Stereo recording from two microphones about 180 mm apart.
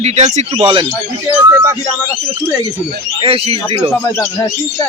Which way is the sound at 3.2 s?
35° right (ahead or behind).